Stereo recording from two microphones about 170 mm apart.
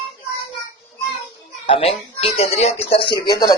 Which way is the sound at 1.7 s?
35° left (ahead or behind).